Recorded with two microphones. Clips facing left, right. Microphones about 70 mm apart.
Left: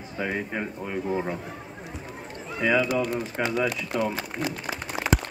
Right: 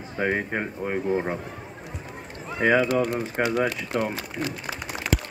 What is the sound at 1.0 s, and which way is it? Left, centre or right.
Speech, right.